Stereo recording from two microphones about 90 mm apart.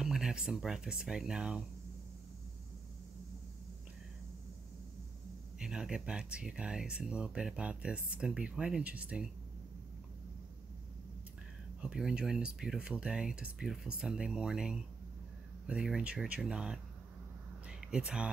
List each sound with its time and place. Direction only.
0.0 s speech: 5° right (ahead or behind)
5.6 s speech: 10° right (ahead or behind)
11.8 s speech: 10° right (ahead or behind)
17.6 s a sound: 10° right (ahead or behind)